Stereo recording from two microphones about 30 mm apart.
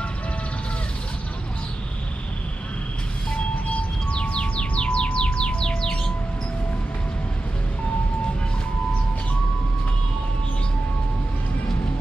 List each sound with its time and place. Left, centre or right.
3.6 s music: left